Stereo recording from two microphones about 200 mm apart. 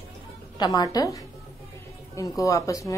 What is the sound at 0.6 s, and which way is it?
Speech, 20° left (ahead or behind).